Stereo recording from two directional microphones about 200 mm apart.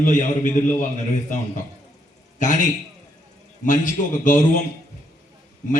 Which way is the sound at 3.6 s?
40° left (ahead or behind).